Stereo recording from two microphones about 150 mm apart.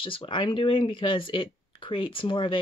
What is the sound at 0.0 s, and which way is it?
Speech, 35° left (ahead or behind).